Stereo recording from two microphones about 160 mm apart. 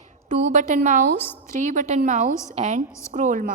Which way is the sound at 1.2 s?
10° left (ahead or behind).